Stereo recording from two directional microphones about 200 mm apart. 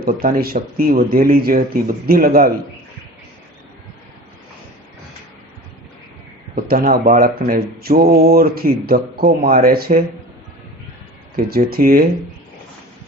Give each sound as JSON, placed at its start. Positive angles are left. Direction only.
{"t": 0.0, "sound": "speech", "side_deg": -50}
{"t": 6.7, "sound": "speech", "side_deg": -50}
{"t": 11.3, "sound": "speech", "side_deg": -50}